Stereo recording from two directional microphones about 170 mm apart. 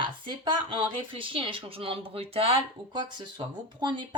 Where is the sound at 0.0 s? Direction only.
30° right (ahead or behind).